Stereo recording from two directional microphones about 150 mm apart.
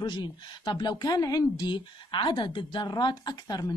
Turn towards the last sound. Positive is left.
turn(degrees=30)  # may be behind; listen again after turning